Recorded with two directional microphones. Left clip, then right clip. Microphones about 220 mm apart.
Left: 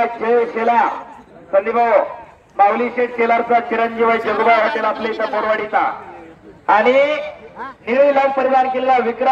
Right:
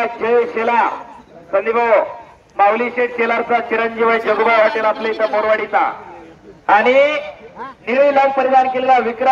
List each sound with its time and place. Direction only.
0.0 s a man's voice: 50° left (ahead or behind)